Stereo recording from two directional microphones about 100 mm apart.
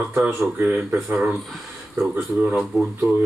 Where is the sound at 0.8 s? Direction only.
25° right (ahead or behind).